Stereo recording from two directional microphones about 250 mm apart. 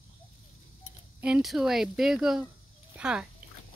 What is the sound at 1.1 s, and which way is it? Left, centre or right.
A child's voice, centre.